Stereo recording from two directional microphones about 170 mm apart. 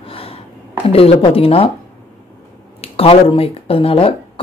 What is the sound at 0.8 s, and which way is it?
Speech, 35° left (ahead or behind).